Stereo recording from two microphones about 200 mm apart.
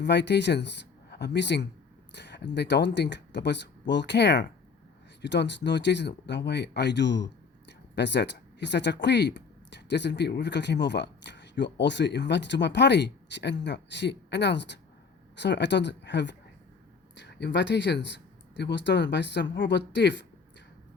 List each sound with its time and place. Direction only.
0.0 s speech: 60° left (ahead or behind)